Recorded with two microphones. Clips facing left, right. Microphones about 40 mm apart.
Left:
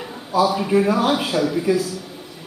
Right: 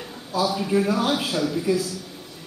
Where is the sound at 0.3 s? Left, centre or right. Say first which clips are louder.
Left 5 dB; centre.